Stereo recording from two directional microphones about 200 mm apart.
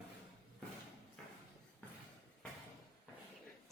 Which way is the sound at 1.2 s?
Centre (ahead or behind).